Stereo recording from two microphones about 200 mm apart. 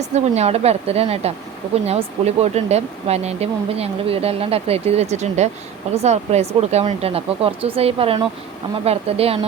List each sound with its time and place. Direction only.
0.0 s speech: 35° right (ahead or behind)